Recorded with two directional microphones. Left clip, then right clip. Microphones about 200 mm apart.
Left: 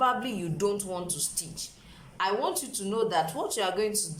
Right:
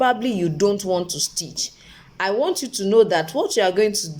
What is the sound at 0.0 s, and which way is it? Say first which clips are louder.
Speech: right 8 dB; 35° right (ahead or behind).